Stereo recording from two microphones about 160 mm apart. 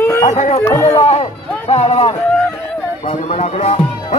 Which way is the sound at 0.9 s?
40° left (ahead or behind).